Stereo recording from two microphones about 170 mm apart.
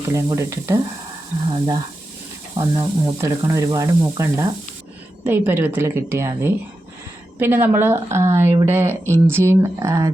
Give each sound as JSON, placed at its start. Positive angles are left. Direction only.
{"t": 0.1, "sound": "speech", "side_deg": -15}
{"t": 2.6, "sound": "sizzle", "side_deg": -20}
{"t": 5.2, "sound": "speech", "side_deg": -10}